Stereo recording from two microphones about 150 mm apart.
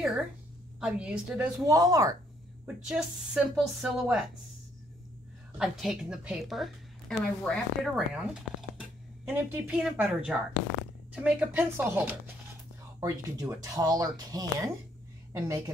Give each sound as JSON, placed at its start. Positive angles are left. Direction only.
{"t": 0.7, "sound": "speech", "side_deg": -5}
{"t": 1.7, "sound": "speech", "side_deg": -25}
{"t": 2.6, "sound": "a woman's voice", "side_deg": -5}
{"t": 5.6, "sound": "a woman's voice", "side_deg": -5}